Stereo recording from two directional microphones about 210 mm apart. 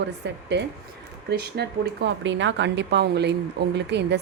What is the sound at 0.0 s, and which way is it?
Speech, 55° right (ahead or behind).